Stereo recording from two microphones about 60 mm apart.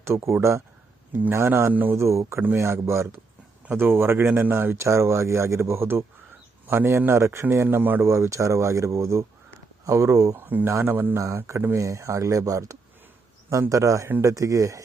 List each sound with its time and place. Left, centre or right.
0.0 s speech: right
1.7 s speech: right
2.0 s speech: right
7.8 s speech: right
8.0 s speech: right
10.3 s speech: right
11.3 s speech: right